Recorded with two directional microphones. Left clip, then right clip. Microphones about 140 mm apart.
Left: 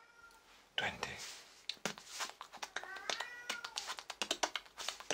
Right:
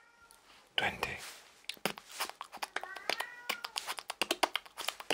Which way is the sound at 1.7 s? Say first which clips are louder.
Right 4 dB; 35° right (ahead or behind).